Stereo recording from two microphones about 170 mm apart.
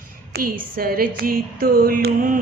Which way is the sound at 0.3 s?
60° right (ahead or behind).